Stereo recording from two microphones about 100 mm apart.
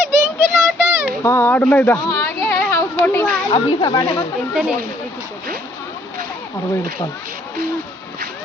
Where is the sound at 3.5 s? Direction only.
45° left (ahead or behind).